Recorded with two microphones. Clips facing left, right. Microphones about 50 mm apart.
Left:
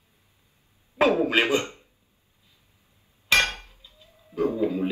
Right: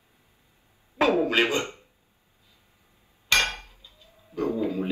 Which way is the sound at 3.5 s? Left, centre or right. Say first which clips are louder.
Right 1 dB; right.